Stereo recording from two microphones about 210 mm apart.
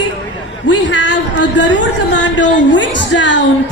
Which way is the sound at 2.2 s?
60° left (ahead or behind).